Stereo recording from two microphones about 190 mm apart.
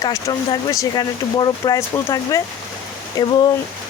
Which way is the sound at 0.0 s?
20° left (ahead or behind).